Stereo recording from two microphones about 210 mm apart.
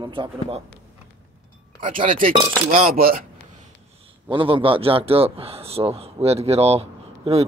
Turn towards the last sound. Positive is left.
turn(degrees=-30)  # may be behind; listen again after turning